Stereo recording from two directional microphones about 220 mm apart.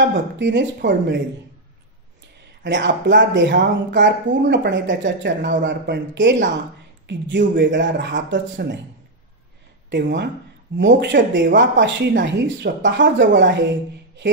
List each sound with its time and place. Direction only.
0.1 s speech: 55° right (ahead or behind)
2.6 s speech: 55° right (ahead or behind)
9.8 s speech: 55° right (ahead or behind)